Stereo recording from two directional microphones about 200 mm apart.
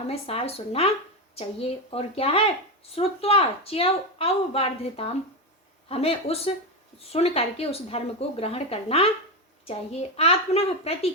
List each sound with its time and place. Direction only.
0.1 s speech: 30° left (ahead or behind)